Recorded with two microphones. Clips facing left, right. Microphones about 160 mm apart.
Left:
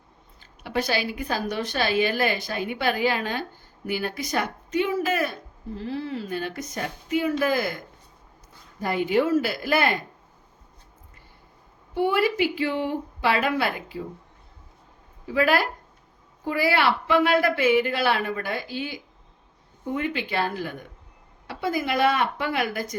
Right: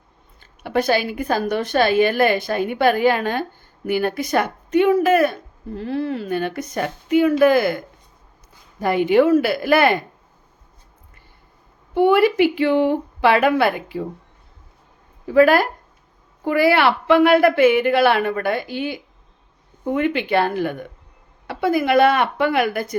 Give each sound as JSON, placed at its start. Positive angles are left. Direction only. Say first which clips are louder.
{"t": 0.3, "sound": "a woman's voice", "louder": "right 6 dB", "side_deg": -55}
{"t": 8.8, "sound": "speech", "louder": "right 7 dB", "side_deg": -70}
{"t": 11.9, "sound": "speech", "louder": "right 8 dB", "side_deg": -60}
{"t": 15.3, "sound": "a woman's voice", "louder": "right 8 dB", "side_deg": -50}
{"t": 16.4, "sound": "speech", "louder": "right 7 dB", "side_deg": -65}